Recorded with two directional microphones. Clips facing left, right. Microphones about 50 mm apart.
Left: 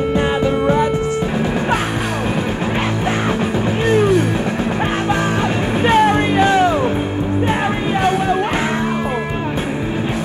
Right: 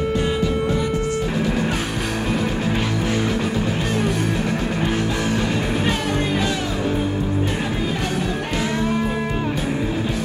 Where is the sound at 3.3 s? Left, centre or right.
Left.